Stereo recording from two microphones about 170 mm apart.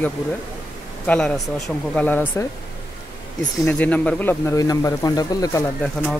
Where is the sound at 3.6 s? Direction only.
10° left (ahead or behind).